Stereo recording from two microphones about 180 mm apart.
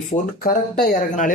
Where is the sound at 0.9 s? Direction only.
45° left (ahead or behind).